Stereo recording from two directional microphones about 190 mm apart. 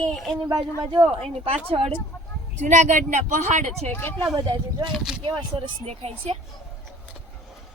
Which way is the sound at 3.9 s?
10° left (ahead or behind).